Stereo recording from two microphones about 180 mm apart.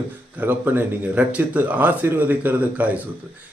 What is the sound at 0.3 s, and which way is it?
Speech, 10° right (ahead or behind).